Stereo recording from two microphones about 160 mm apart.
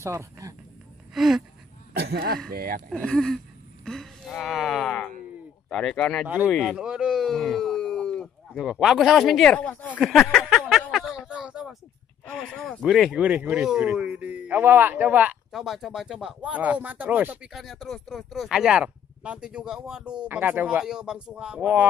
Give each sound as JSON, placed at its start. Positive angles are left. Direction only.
{"t": 0.0, "sound": "speech", "side_deg": -20}
{"t": 1.1, "sound": "a sound", "side_deg": 0}
{"t": 2.0, "sound": "speech", "side_deg": -80}
{"t": 2.9, "sound": "speech", "side_deg": 5}
{"t": 6.2, "sound": "speech", "side_deg": -10}
{"t": 6.5, "sound": "a sound", "side_deg": 0}
{"t": 8.6, "sound": "speech", "side_deg": -5}
{"t": 9.9, "sound": "a sound", "side_deg": 0}
{"t": 12.3, "sound": "speech", "side_deg": 5}